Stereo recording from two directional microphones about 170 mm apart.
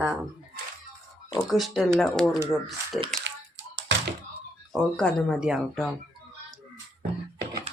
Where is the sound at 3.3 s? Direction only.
90° right.